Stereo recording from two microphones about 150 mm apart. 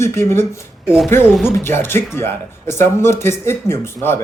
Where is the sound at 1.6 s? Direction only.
15° left (ahead or behind).